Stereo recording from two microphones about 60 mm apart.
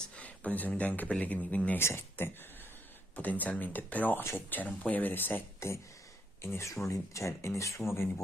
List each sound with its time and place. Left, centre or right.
0.1 s speech: left
1.8 s speech: left
3.2 s speech: left
5.6 s speech: left